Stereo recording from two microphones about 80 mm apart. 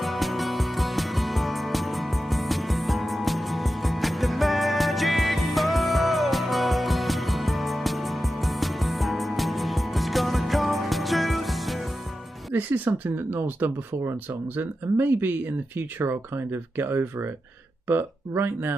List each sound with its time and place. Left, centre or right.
0.0 s music: centre
12.5 s speech: right